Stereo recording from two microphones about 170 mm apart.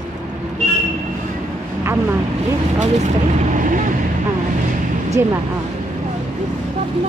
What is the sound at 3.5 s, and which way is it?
Vehicle, 50° right (ahead or behind).